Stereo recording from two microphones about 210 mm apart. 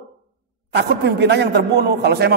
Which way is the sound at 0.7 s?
55° right (ahead or behind).